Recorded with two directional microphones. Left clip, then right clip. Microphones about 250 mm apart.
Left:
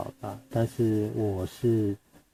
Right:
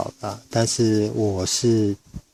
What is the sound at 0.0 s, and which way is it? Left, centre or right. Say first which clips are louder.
Speech: right 8 dB; right.